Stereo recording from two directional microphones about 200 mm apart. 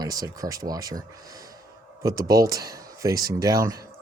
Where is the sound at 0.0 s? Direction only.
20° right (ahead or behind).